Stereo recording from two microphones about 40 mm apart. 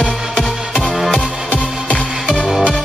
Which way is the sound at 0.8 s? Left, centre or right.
Centre.